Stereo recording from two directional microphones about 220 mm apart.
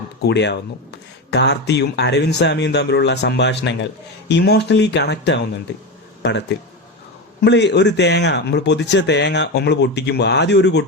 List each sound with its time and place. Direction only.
0.2 s speech: 50° left (ahead or behind)